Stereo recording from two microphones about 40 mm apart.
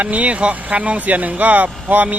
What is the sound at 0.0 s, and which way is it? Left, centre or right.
Speech, right.